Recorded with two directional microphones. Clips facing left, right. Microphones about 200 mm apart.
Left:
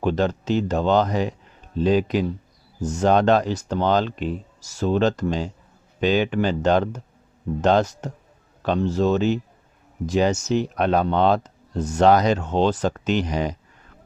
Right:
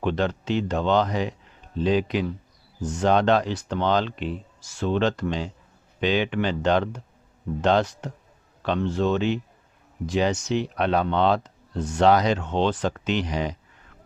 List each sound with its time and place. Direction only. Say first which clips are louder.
0.0 s speech: left 3 dB; 40° left (ahead or behind)